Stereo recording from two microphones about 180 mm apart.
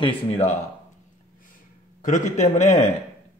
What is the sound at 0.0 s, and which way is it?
Speech, 35° left (ahead or behind).